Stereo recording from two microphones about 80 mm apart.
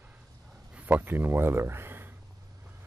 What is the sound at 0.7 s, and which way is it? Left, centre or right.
Speech, centre.